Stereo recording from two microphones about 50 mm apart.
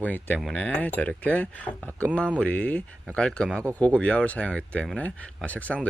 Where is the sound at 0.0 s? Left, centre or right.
Left.